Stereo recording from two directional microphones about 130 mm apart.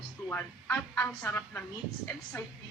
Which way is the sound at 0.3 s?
15° left (ahead or behind).